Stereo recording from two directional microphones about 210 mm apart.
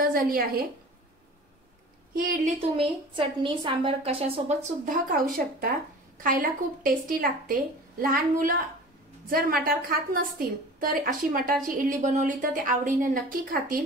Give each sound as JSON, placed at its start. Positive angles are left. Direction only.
{"t": 0.0, "sound": "a woman's voice", "side_deg": -45}
{"t": 2.1, "sound": "a woman's voice", "side_deg": -40}
{"t": 2.6, "sound": "a woman's voice", "side_deg": -25}